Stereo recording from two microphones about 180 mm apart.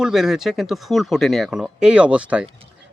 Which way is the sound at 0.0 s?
Centre (ahead or behind).